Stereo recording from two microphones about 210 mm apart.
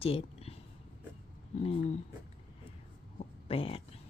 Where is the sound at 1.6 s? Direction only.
30° left (ahead or behind).